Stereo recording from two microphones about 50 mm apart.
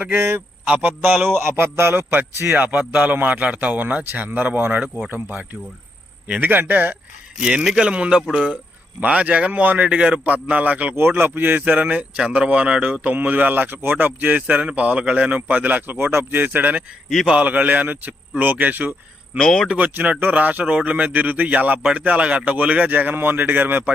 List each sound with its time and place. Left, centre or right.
0.0 s speech: right
0.7 s speech: right
1.3 s a man's voice: right
2.6 s a man's voice: right
7.4 s speech: centre
9.0 s a man's voice: right
9.9 s a man's voice: right
11.2 s a man's voice: right
19.4 s speech: centre
19.8 s speech: right